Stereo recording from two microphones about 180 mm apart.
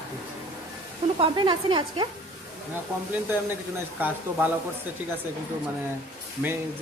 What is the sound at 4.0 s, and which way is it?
Speech, 10° right (ahead or behind).